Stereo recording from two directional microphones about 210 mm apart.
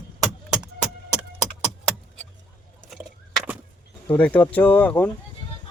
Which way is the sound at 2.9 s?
5° right (ahead or behind).